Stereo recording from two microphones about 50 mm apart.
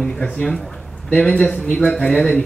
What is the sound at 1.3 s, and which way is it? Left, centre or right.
Speech, left.